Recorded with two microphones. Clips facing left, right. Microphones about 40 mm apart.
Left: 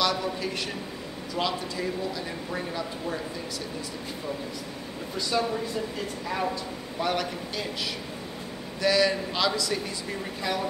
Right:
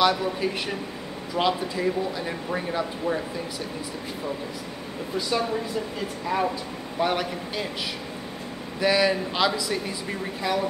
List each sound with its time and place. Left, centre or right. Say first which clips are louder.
0.0 s speech: right 5 dB; centre
5.1 s speech: right 2 dB; centre
8.8 s speech: right 2 dB; centre